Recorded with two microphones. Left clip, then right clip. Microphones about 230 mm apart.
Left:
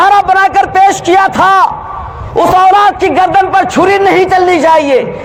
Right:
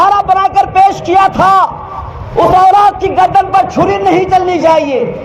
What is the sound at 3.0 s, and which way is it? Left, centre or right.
A man's voice, left.